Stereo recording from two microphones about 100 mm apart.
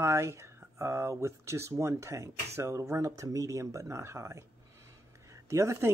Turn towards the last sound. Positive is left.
turn(degrees=-30)  # may be behind; listen again after turning